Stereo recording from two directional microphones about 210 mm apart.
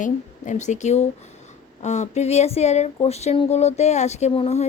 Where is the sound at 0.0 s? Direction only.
35° left (ahead or behind).